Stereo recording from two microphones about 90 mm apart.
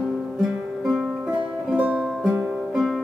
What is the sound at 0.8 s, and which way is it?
Music, 5° right (ahead or behind).